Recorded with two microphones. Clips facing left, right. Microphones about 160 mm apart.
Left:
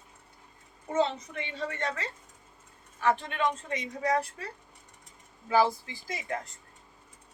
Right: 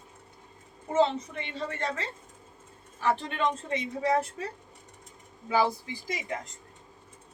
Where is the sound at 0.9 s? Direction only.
30° right (ahead or behind).